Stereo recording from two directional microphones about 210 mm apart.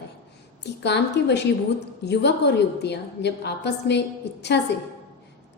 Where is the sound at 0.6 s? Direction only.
55° left (ahead or behind).